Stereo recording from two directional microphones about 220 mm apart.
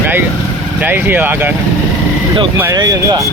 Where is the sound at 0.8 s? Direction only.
10° right (ahead or behind).